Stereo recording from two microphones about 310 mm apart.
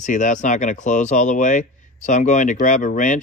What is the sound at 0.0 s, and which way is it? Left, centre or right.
Speech, left.